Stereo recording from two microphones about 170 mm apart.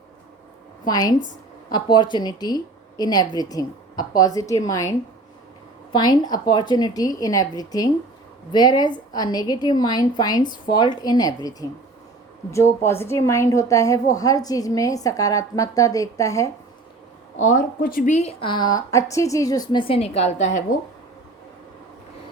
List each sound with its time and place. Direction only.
0.9 s a woman's voice: 20° left (ahead or behind)
17.4 s a woman's voice: 50° left (ahead or behind)